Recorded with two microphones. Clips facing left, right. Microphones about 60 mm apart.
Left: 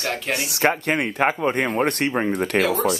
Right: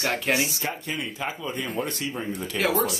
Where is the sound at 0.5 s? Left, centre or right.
Left.